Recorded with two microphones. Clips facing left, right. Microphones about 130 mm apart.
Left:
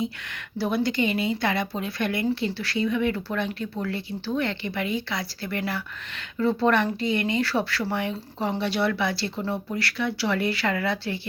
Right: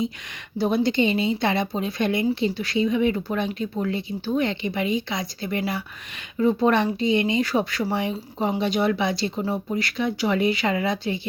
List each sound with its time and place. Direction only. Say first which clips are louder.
0.6 s speech: right 3 dB; 25° right (ahead or behind)